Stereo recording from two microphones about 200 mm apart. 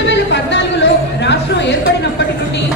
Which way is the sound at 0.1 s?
60° left (ahead or behind).